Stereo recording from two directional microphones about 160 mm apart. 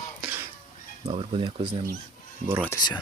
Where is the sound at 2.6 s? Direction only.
25° left (ahead or behind).